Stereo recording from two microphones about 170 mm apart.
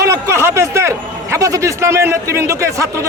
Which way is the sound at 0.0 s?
20° right (ahead or behind).